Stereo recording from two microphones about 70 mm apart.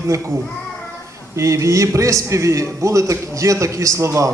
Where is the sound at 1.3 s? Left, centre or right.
Right.